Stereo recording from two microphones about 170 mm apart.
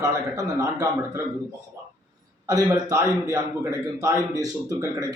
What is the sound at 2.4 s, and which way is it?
A man's voice, 20° right (ahead or behind).